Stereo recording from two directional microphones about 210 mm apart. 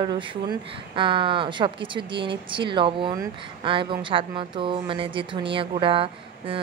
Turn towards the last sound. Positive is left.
turn(degrees=-25)  # may be behind; listen again after turning